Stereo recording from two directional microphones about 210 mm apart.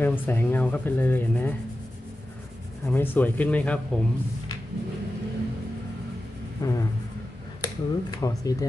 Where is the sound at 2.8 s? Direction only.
10° left (ahead or behind).